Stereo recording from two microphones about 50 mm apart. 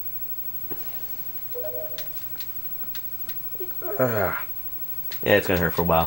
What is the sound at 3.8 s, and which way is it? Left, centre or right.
Speech, centre.